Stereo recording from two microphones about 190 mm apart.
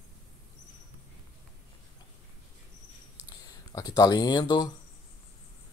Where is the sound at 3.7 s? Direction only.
20° left (ahead or behind).